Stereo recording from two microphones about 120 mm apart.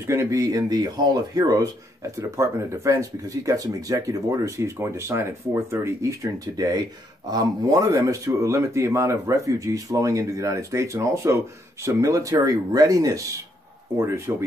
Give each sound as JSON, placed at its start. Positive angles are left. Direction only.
{"t": 0.0, "sound": "speech", "side_deg": -20}